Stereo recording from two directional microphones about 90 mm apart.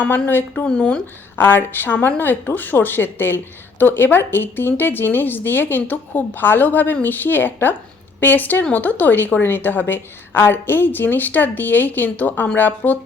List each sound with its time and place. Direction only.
0.3 s speech: 20° left (ahead or behind)
1.4 s speech: 25° left (ahead or behind)